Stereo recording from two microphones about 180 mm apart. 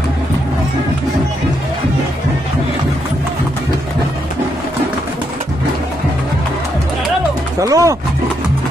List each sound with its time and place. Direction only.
7.6 s speech: 20° right (ahead or behind)